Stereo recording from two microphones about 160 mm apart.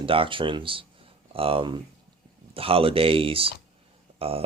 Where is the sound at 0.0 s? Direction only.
35° right (ahead or behind).